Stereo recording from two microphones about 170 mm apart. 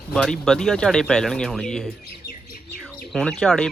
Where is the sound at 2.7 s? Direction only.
5° left (ahead or behind).